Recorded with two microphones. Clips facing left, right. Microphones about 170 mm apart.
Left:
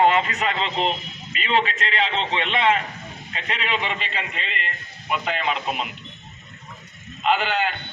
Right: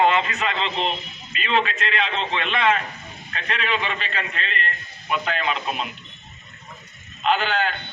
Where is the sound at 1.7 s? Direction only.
30° left (ahead or behind).